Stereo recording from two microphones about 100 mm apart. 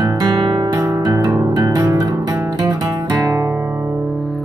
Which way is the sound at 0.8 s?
35° right (ahead or behind).